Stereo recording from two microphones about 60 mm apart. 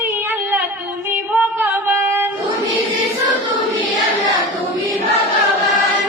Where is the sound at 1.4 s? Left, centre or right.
Right.